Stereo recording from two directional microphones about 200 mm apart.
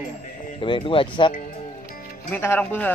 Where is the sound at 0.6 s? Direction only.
25° left (ahead or behind).